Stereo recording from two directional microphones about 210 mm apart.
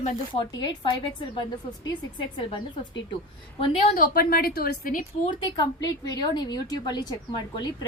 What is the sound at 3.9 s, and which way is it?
A woman's voice, 40° left (ahead or behind).